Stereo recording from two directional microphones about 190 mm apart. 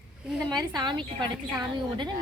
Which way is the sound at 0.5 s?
25° right (ahead or behind).